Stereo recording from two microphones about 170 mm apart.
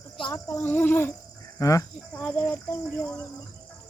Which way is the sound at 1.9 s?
5° left (ahead or behind).